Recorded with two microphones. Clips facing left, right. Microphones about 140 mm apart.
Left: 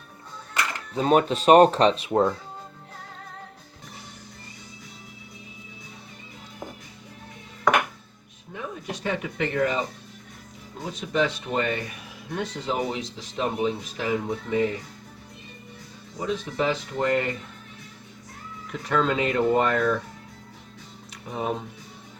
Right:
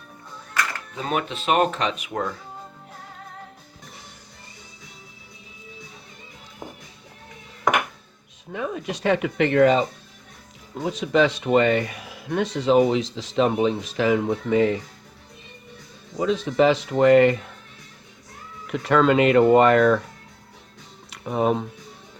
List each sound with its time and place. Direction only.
0.9 s speech: 35° left (ahead or behind)
8.5 s speech: 90° right
10.8 s speech: 90° right
16.1 s speech: 90° right
18.7 s speech: 80° right
21.1 s speech: 75° right (ahead or behind)